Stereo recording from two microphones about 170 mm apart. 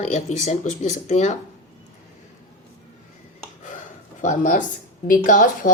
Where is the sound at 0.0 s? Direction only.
40° left (ahead or behind).